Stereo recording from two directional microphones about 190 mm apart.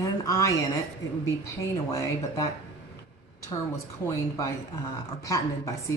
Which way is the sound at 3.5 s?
25° left (ahead or behind).